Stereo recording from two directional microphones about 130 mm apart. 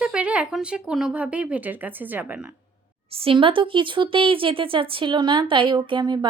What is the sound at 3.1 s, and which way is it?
Speech, 45° right (ahead or behind).